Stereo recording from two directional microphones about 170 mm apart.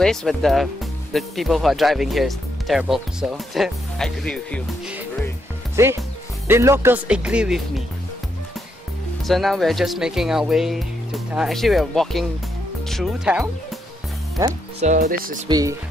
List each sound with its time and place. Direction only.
0.0 s speech: 5° left (ahead or behind)
5.8 s speech: 15° right (ahead or behind)
9.2 s speech: centre (ahead or behind)
14.4 s speech: 15° right (ahead or behind)
14.8 s speech: 50° right (ahead or behind)
15.4 s speech: 20° right (ahead or behind)